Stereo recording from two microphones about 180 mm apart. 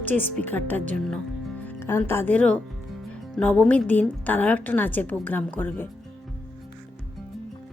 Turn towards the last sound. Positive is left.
turn(degrees=10)  # may be behind; listen again after turning